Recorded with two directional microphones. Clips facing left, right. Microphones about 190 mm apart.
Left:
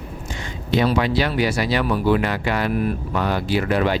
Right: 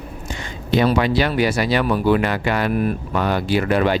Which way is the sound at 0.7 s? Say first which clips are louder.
Right 2 dB; 55° right (ahead or behind).